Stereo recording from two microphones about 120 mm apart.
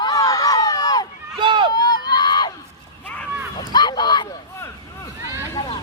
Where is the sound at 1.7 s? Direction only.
35° left (ahead or behind).